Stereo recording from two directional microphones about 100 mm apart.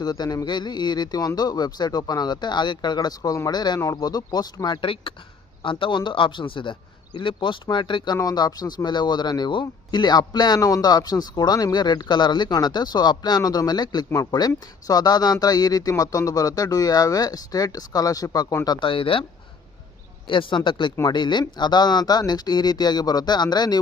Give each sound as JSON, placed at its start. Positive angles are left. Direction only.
{"t": 0.0, "sound": "a man's voice", "side_deg": 40}
{"t": 5.6, "sound": "a man's voice", "side_deg": 55}
{"t": 18.8, "sound": "speech", "side_deg": 60}
{"t": 20.2, "sound": "a man's voice", "side_deg": 55}